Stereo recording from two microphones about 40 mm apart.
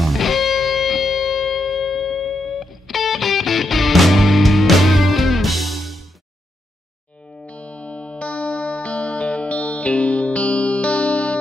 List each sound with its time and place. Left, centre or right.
0.0 s music: centre
7.4 s music: left